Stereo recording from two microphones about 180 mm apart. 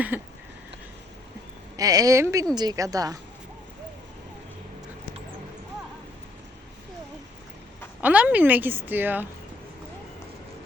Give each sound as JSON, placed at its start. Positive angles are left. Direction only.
{"t": 0.1, "sound": "a woman's voice", "side_deg": -10}
{"t": 1.7, "sound": "speech", "side_deg": -20}
{"t": 8.0, "sound": "a woman's voice", "side_deg": -10}